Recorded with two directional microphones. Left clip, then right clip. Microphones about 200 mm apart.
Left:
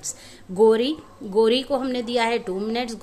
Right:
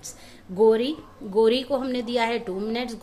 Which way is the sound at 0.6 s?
15° left (ahead or behind).